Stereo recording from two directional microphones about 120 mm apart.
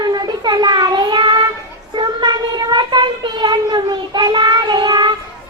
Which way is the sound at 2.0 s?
40° right (ahead or behind).